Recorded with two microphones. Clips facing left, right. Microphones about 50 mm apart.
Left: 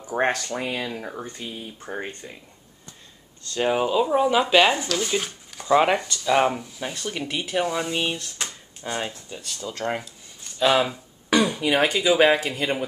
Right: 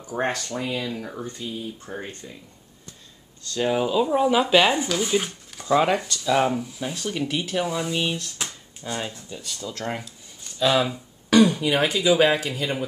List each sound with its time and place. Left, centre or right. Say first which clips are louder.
0.0 s speech: left 3 dB; left
0.9 s speech: even; centre
3.4 s speech: left 1 dB; centre
4.7 s speech: right 2 dB; centre
5.6 s speech: left 1 dB; centre